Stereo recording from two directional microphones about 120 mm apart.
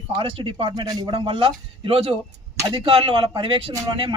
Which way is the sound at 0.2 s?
50° right (ahead or behind).